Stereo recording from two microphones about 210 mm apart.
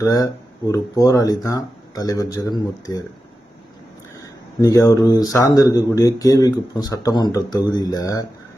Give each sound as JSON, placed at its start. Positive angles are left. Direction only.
{"t": 0.0, "sound": "speech", "side_deg": 15}
{"t": 4.6, "sound": "speech", "side_deg": 15}